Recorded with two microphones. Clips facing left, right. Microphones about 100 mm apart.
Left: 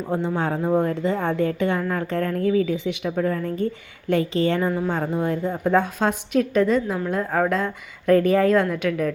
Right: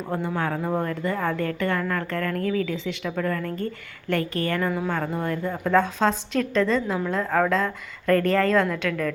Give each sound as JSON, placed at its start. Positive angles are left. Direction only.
{"t": 0.3, "sound": "a woman's voice", "side_deg": 20}